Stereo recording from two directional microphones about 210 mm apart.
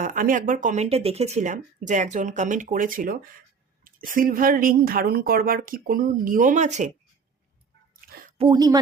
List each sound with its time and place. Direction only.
0.0 s speech: 40° right (ahead or behind)
8.4 s speech: 20° right (ahead or behind)